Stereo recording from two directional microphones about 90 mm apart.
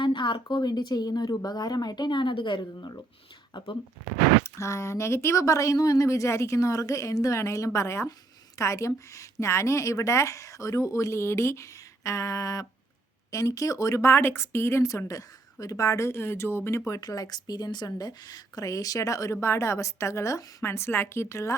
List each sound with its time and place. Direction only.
0.0 s speech: 65° left (ahead or behind)
4.4 s a woman's voice: 35° left (ahead or behind)
19.4 s a woman's voice: 30° left (ahead or behind)